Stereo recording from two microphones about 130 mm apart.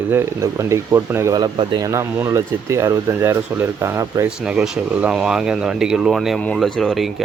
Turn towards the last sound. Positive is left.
turn(degrees=0)  # may be behind; listen again after turning